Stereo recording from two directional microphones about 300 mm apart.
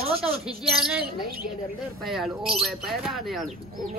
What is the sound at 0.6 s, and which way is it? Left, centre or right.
Speech, centre.